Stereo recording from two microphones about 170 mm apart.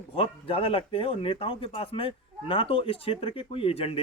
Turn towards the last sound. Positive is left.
turn(degrees=35)  # may be behind; listen again after turning